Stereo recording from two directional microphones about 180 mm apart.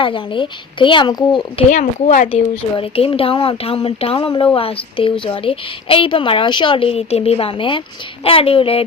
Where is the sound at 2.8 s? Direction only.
30° left (ahead or behind).